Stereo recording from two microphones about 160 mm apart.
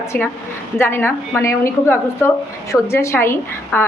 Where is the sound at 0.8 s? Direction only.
15° left (ahead or behind).